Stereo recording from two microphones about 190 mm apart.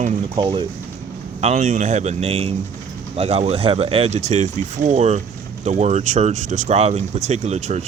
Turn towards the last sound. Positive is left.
turn(degrees=-35)  # may be behind; listen again after turning